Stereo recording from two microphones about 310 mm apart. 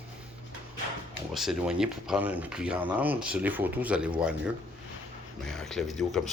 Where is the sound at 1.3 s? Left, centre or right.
Centre.